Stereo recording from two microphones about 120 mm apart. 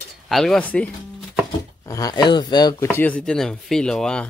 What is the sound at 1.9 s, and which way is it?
Speech, 30° left (ahead or behind).